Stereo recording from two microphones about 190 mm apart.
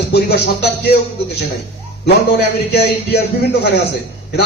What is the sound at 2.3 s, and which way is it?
Speech, 55° left (ahead or behind).